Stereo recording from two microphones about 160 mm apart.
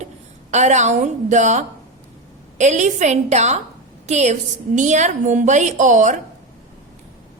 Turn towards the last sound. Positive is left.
turn(degrees=-50)  # may be behind; listen again after turning